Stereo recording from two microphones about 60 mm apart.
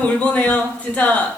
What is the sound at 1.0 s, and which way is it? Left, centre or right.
Speech, left.